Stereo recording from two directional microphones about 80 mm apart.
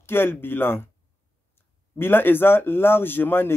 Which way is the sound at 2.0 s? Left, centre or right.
Left.